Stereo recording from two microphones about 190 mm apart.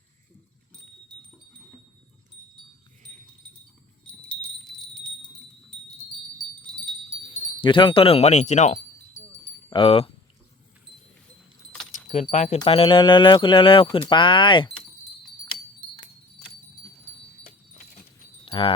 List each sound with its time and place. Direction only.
4.0 s wind chime: 5° left (ahead or behind)
7.6 s wind chime: 25° left (ahead or behind)
9.6 s speech: 30° left (ahead or behind)
11.9 s keys jangling: 40° left (ahead or behind)
12.3 s wind chime: 40° left (ahead or behind)
12.5 s speech: 30° left (ahead or behind)
18.4 s wind chime: 30° left (ahead or behind)